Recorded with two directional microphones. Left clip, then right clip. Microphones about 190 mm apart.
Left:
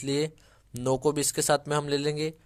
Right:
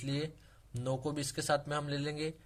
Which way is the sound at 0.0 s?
45° left (ahead or behind).